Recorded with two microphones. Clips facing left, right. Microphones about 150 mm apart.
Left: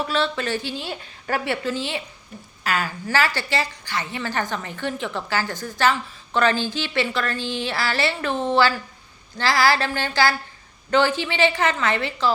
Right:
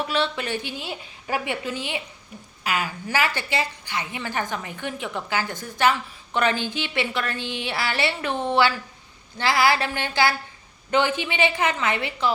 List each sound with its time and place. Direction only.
0.1 s a woman's voice: 15° right (ahead or behind)